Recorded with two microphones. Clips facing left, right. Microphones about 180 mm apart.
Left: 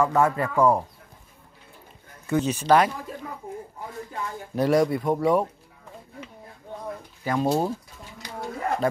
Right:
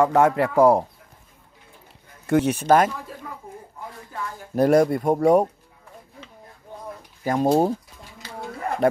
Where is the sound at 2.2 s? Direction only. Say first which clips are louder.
Right 3 dB; 65° right (ahead or behind); by 2.9 s 50° right (ahead or behind).